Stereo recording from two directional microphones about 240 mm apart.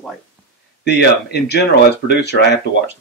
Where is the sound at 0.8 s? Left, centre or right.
Left.